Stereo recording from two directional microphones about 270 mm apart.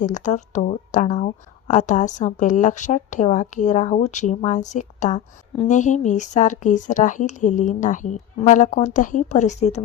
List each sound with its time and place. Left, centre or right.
0.0 s speech: left